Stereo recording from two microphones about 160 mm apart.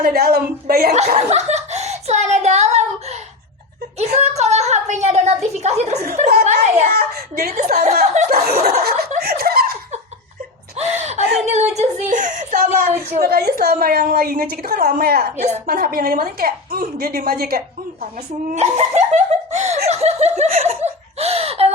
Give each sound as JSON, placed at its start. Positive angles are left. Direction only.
{"t": 0.0, "sound": "a woman's voice", "side_deg": -75}
{"t": 0.9, "sound": "a sound", "side_deg": -45}
{"t": 3.9, "sound": "a woman's voice", "side_deg": -45}
{"t": 6.4, "sound": "a sound", "side_deg": -45}
{"t": 6.9, "sound": "a woman's voice", "side_deg": -65}
{"t": 7.6, "sound": "speech", "side_deg": -45}
{"t": 8.3, "sound": "a woman's voice", "side_deg": -75}
{"t": 9.2, "sound": "snicker", "side_deg": -75}
{"t": 10.8, "sound": "a sound", "side_deg": -45}
{"t": 11.8, "sound": "a woman's voice", "side_deg": -50}
{"t": 18.5, "sound": "speech", "side_deg": -45}
{"t": 20.6, "sound": "laughter", "side_deg": -40}